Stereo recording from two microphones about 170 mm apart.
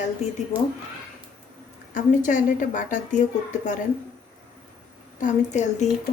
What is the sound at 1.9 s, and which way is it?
A woman's voice, 50° left (ahead or behind).